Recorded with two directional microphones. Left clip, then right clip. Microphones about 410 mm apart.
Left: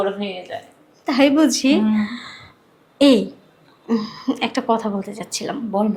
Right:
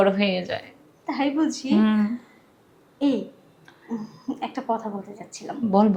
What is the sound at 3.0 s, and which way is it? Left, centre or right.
Speech, left.